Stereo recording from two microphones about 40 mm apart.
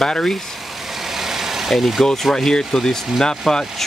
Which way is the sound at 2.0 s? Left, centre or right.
Centre.